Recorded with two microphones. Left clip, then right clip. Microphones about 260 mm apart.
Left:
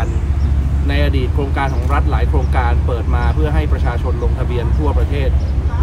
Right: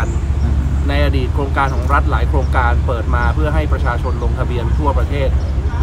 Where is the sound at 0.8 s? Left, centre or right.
Centre.